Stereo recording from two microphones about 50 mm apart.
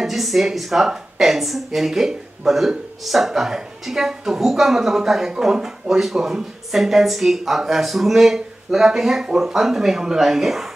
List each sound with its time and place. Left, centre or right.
0.0 s speech: centre